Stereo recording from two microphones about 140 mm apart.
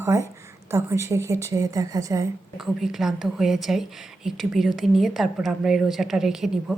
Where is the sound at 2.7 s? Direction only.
Centre (ahead or behind).